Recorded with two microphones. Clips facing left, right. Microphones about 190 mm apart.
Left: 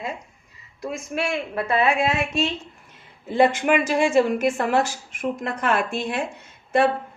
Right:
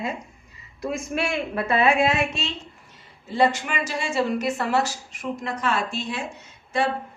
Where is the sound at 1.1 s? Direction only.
45° left (ahead or behind).